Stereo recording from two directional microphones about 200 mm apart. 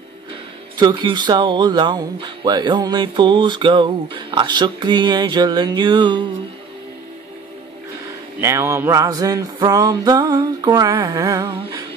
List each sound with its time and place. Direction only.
0.7 s speech: 20° right (ahead or behind)
8.4 s music: 15° right (ahead or behind)